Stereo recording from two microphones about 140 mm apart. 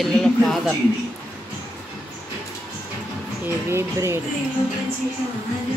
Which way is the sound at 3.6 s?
20° right (ahead or behind).